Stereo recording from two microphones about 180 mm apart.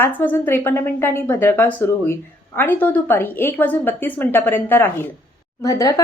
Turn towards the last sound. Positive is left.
turn(degrees=20)  # may be behind; listen again after turning